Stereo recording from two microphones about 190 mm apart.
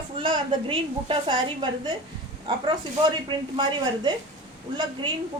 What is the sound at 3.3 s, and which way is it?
Speech, 25° right (ahead or behind).